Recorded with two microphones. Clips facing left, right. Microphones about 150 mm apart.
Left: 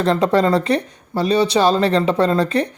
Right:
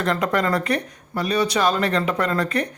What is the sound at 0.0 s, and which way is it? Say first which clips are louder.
Speech: left 6 dB; 30° left (ahead or behind).